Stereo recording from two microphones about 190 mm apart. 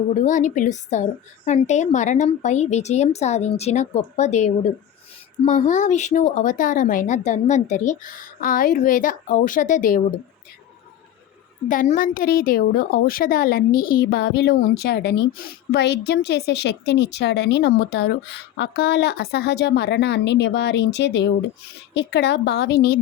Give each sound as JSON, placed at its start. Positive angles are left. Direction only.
{"t": 0.2, "sound": "speech", "side_deg": 40}
{"t": 11.7, "sound": "a woman's voice", "side_deg": 45}